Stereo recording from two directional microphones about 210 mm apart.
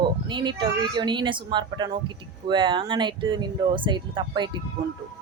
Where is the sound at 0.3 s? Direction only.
20° right (ahead or behind).